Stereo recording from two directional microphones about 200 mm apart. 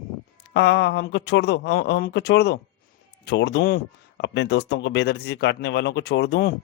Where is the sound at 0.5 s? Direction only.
60° left (ahead or behind).